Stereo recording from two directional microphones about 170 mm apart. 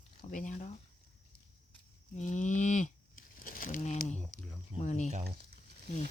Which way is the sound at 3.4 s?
55° left (ahead or behind).